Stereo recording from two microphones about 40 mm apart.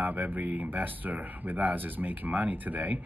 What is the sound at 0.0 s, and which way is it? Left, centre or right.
Speech, right.